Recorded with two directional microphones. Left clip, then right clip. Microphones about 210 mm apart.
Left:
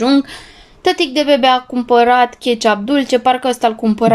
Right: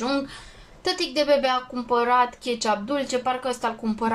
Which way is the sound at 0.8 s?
40° left (ahead or behind).